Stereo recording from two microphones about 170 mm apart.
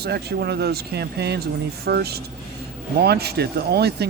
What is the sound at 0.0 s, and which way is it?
Speech, 70° right (ahead or behind).